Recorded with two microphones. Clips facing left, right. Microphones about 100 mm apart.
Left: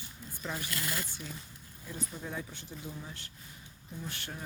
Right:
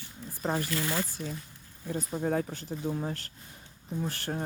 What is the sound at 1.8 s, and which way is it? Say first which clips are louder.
Speech: right 10 dB; 50° right (ahead or behind).